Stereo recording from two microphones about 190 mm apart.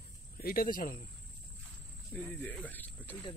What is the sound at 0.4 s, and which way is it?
Speech, 50° left (ahead or behind).